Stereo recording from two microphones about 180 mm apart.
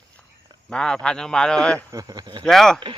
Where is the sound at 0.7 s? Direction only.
5° left (ahead or behind).